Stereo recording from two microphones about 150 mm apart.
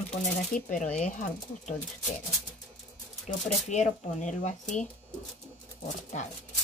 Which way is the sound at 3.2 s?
50° left (ahead or behind).